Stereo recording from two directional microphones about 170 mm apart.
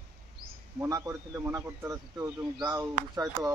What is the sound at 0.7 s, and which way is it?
A man's voice, 20° right (ahead or behind).